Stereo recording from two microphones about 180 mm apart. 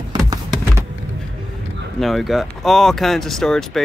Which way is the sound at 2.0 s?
Centre (ahead or behind).